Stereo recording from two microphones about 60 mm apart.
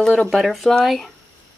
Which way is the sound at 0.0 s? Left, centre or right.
Centre.